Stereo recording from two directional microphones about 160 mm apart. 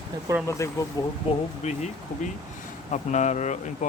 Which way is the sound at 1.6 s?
50° left (ahead or behind).